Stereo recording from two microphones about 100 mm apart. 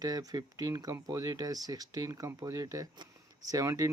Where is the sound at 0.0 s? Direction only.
40° right (ahead or behind).